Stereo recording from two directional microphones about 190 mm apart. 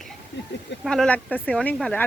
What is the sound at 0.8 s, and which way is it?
Speech, 5° left (ahead or behind).